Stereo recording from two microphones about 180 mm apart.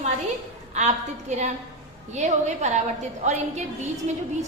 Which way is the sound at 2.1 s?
40° right (ahead or behind).